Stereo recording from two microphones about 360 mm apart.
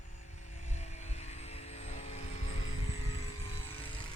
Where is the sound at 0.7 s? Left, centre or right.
Centre.